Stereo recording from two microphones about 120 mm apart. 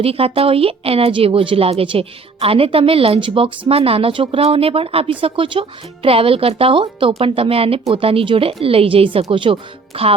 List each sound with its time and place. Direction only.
0.0 s speech: 55° right (ahead or behind)